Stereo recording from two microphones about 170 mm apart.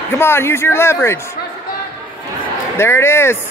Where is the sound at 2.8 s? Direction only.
15° left (ahead or behind).